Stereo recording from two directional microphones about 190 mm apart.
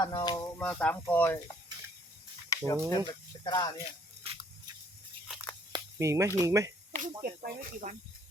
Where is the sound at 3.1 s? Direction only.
20° left (ahead or behind).